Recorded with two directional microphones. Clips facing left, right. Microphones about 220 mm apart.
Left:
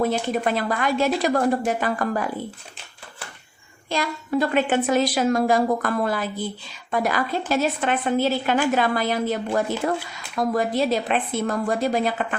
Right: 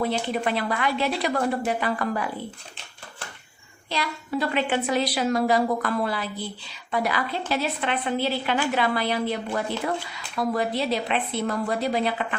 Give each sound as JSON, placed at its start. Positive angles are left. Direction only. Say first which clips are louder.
{"t": 0.0, "sound": "a woman's voice", "louder": "left 3 dB", "side_deg": 45}
{"t": 3.8, "sound": "a woman's voice", "louder": "left 4 dB", "side_deg": 45}